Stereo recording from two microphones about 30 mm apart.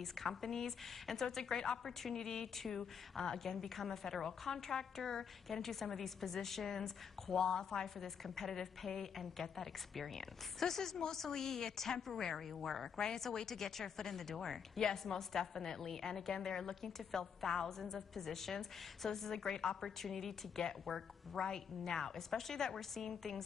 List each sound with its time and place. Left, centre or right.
0.0 s a woman's voice: centre
7.3 s a woman's voice: left; by 12.9 s centre
12.9 s a woman's voice: left
14.8 s a woman's voice: left; by 21.4 s centre
21.4 s a woman's voice: centre